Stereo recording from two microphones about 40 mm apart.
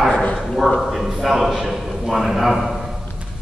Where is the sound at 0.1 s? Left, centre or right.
Left.